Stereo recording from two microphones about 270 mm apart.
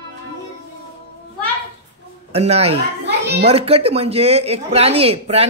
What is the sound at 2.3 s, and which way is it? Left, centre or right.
Speech, right.